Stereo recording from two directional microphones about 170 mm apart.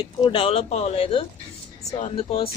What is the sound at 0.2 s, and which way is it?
Speech, 30° left (ahead or behind).